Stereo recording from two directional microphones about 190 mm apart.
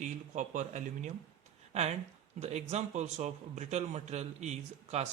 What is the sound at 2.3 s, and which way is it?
Speech, 35° right (ahead or behind).